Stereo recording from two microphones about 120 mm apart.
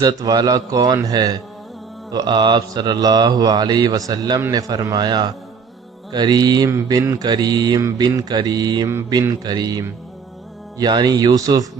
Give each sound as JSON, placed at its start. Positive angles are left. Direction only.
{"t": 0.0, "sound": "mantra", "side_deg": -30}